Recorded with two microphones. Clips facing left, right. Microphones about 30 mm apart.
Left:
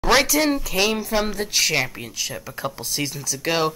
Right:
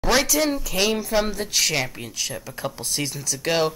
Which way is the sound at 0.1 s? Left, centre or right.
Centre.